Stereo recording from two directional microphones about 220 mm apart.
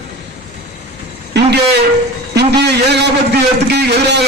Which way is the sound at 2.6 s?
50° right (ahead or behind).